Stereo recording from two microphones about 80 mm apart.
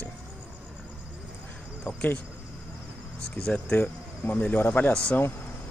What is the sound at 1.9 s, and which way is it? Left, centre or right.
Speech, centre.